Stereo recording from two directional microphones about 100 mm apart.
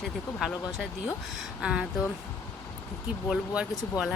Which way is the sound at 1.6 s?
5° right (ahead or behind).